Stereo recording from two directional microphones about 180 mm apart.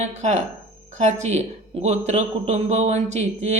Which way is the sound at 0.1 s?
40° right (ahead or behind).